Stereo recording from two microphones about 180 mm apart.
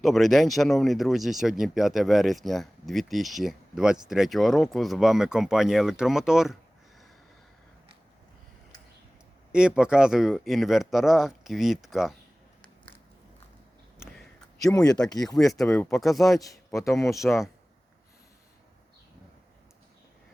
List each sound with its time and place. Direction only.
0.0 s speech: centre (ahead or behind)
9.5 s speech: 5° right (ahead or behind)
12.6 s a sound: 30° left (ahead or behind)
15.0 s speech: 5° left (ahead or behind)
16.7 s speech: 15° left (ahead or behind)
17.2 s speech: centre (ahead or behind)